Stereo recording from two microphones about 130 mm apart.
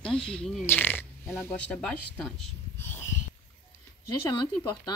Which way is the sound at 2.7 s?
20° left (ahead or behind).